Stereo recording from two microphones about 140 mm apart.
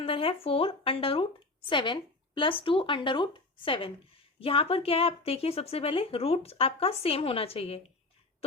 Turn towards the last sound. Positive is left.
turn(degrees=45)  # may be behind; listen again after turning